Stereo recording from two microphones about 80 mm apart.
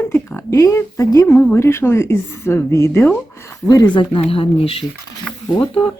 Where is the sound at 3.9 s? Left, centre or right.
Left.